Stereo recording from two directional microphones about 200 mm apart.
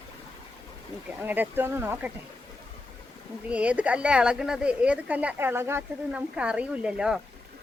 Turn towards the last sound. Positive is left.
turn(degrees=-5)  # may be behind; listen again after turning